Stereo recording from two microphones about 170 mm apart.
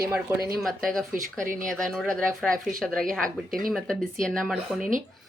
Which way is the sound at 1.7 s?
Centre (ahead or behind).